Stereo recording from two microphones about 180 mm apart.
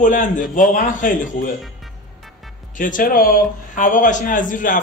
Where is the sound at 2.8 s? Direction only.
50° left (ahead or behind).